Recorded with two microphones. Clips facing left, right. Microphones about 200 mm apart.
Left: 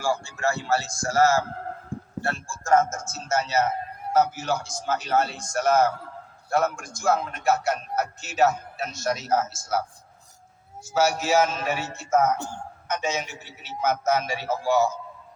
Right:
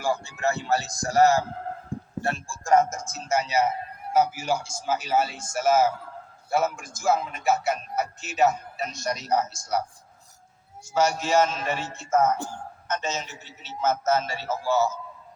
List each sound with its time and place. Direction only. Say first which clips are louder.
0.0 s speech: even; 20° right (ahead or behind)
1.9 s a sound: even; 15° right (ahead or behind)
2.2 s a man's voice: right 1 dB; 15° right (ahead or behind); by 9.8 s 5° left (ahead or behind)
10.9 s a man's voice: left 1 dB; 5° left (ahead or behind)